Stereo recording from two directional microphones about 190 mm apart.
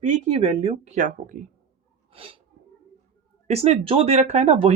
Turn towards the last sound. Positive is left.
turn(degrees=-35)  # may be behind; listen again after turning